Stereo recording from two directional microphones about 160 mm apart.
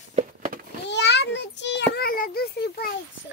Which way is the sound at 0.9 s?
90° left.